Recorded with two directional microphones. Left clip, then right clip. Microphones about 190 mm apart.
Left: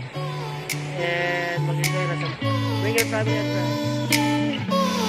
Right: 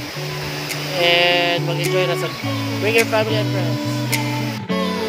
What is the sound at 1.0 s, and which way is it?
Music, 20° right (ahead or behind).